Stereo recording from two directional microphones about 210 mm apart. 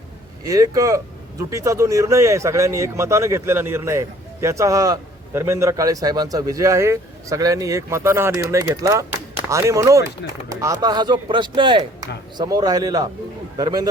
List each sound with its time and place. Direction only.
0.4 s speech: 15° right (ahead or behind)